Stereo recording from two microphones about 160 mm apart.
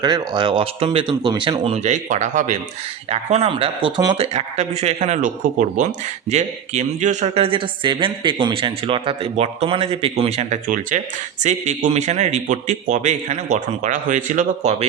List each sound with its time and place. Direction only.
0.0 s a woman's voice: 30° right (ahead or behind)
4.4 s a man's voice: 45° right (ahead or behind)